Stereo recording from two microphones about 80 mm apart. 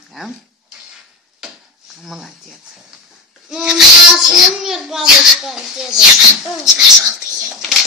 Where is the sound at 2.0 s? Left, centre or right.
Centre.